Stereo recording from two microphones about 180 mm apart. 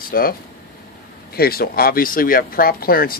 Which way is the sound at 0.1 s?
55° left (ahead or behind).